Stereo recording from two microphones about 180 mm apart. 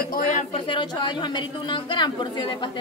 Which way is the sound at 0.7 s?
25° left (ahead or behind).